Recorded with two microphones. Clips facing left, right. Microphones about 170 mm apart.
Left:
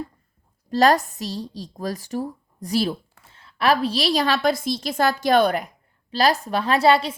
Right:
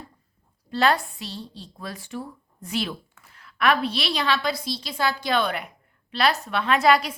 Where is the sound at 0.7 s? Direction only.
40° left (ahead or behind).